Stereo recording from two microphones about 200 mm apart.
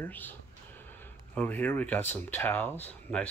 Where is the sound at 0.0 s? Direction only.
10° left (ahead or behind).